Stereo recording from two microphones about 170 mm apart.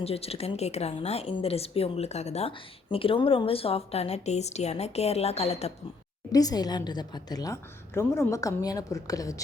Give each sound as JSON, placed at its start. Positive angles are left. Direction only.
{"t": 0.0, "sound": "a woman's voice", "side_deg": 35}
{"t": 6.3, "sound": "a woman's voice", "side_deg": 20}